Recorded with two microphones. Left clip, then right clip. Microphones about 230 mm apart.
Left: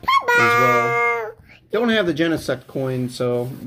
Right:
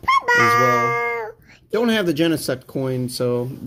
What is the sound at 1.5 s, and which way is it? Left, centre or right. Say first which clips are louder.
Speech: even; right.